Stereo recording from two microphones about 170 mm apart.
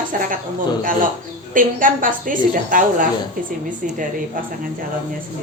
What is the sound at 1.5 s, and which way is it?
A woman's voice, 55° right (ahead or behind).